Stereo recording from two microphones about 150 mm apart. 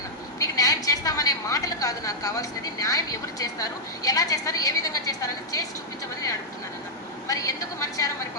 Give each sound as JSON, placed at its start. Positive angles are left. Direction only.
{"t": 0.3, "sound": "a woman's voice", "side_deg": 25}
{"t": 7.3, "sound": "a woman's voice", "side_deg": 20}